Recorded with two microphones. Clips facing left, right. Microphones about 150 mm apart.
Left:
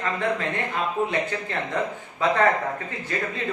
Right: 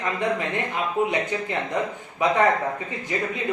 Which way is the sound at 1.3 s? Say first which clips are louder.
Right 1 dB; 15° right (ahead or behind).